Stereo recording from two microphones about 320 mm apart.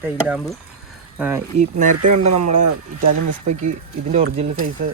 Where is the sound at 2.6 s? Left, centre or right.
Right.